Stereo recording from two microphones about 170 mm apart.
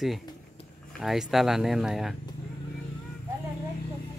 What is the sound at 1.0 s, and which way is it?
Speech, centre (ahead or behind).